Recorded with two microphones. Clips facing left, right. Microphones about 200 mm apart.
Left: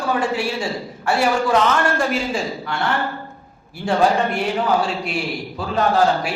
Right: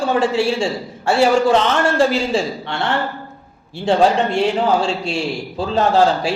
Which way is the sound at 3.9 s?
25° right (ahead or behind).